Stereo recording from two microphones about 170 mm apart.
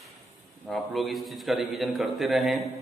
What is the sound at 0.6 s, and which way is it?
A man's voice, centre (ahead or behind).